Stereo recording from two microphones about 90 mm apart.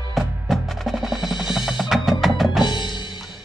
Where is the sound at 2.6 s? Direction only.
55° left (ahead or behind).